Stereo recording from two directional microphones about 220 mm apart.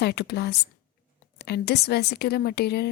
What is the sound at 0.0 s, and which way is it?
Speech, 45° left (ahead or behind).